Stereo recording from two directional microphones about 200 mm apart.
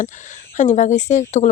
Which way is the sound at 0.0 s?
40° left (ahead or behind).